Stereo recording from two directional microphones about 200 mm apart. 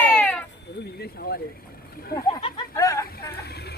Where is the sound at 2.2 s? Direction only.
15° left (ahead or behind).